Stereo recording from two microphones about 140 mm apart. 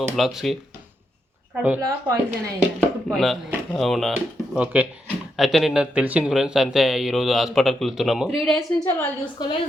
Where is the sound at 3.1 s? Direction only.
Centre (ahead or behind).